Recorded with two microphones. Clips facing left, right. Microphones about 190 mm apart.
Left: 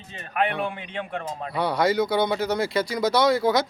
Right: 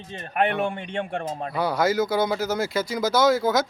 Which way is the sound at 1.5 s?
Centre (ahead or behind).